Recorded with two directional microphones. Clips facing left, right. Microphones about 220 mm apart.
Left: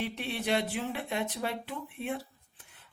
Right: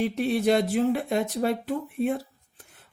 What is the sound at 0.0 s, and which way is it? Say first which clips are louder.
Speech: right 11 dB; 40° right (ahead or behind).